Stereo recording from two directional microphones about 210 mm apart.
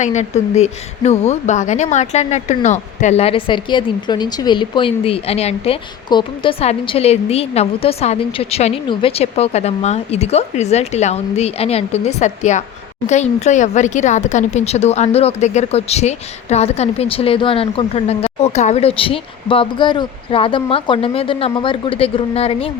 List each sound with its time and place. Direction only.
0.0 s speech: 35° left (ahead or behind)